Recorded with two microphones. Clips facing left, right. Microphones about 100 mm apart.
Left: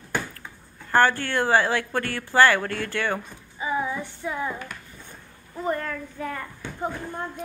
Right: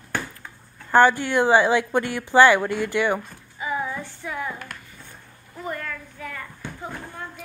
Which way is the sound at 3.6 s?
20° left (ahead or behind).